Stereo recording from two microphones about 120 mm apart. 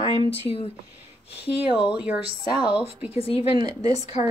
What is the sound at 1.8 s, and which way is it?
Speech, 10° right (ahead or behind).